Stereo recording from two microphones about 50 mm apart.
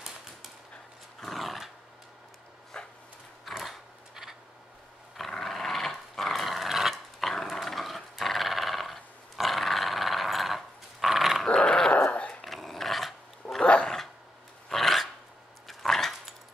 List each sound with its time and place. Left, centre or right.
1.2 s dog: centre
2.8 s a sound: centre
3.4 s a sound: centre
5.1 s dog: centre
7.2 s dog: centre
11.4 s dog: centre
12.4 s dog: centre
13.6 s dog: centre
14.7 s dog: centre